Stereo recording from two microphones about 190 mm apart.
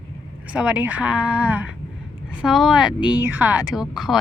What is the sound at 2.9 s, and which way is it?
Speech, 25° left (ahead or behind).